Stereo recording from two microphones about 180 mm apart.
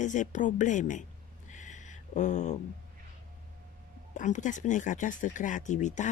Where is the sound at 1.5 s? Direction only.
45° left (ahead or behind).